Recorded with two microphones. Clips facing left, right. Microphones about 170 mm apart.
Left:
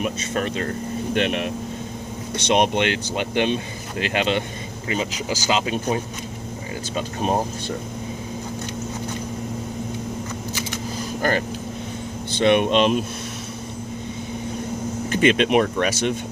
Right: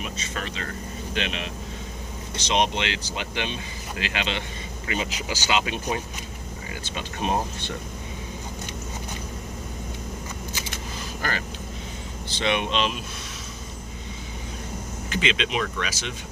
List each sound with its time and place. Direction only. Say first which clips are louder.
0.0 s speech: left 9 dB; 50° left (ahead or behind)
11.2 s speech: left 9 dB; 50° left (ahead or behind)
15.1 s speech: left 9 dB; 50° left (ahead or behind)